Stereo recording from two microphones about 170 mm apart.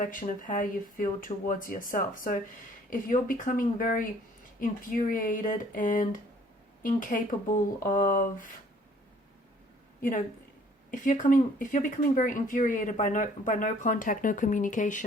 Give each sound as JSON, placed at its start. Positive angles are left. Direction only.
{"t": 0.0, "sound": "speech", "side_deg": 50}
{"t": 10.0, "sound": "speech", "side_deg": 55}